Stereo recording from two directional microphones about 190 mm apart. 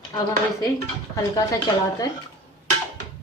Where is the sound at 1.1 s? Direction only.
20° left (ahead or behind).